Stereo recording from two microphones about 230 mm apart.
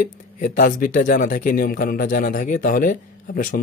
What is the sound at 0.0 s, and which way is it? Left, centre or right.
Speech, left.